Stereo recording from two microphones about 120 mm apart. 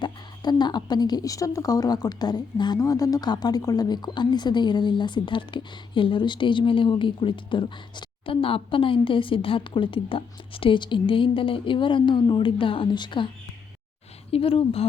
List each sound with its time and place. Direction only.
0.0 s a woman's voice: 35° left (ahead or behind); by 14.8 s 55° left (ahead or behind)